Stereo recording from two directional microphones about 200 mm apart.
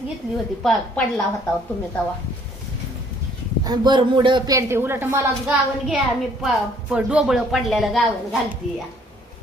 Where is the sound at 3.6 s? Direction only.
20° right (ahead or behind); by 8.0 s centre (ahead or behind).